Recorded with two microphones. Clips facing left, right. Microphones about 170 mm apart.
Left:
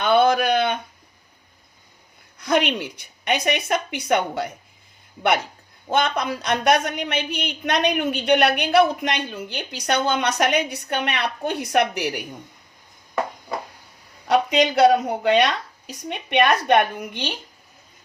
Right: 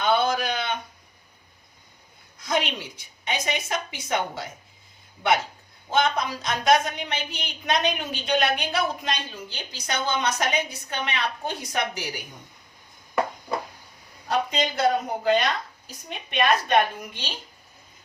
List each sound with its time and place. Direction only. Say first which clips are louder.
0.0 s a sound: left 5 dB; 60° left (ahead or behind)
2.4 s speech: left 6 dB; 65° left (ahead or behind)
5.9 s speech: left 2 dB; 60° left (ahead or behind)
14.3 s a woman's voice: left 7 dB; 75° left (ahead or behind)